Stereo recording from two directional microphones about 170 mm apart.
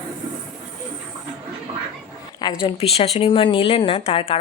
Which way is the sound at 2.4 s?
30° left (ahead or behind).